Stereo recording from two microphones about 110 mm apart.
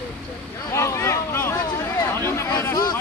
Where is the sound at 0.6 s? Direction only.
25° left (ahead or behind).